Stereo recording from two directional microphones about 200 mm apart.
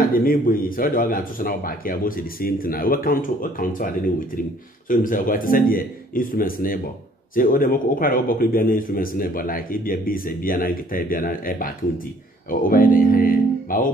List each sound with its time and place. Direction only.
0.1 s a man's voice: 45° left (ahead or behind)